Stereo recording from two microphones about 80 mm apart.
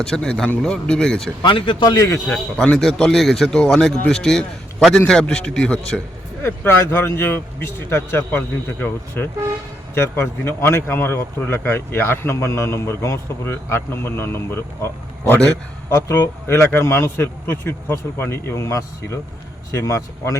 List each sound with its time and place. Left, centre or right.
0.0 s speech: centre
1.4 s speech: left
2.0 s speech: left
2.7 s speech: centre
6.4 s a man's voice: left
15.9 s speech: left